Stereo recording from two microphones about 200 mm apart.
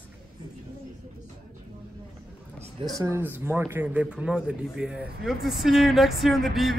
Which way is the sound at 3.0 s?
10° right (ahead or behind).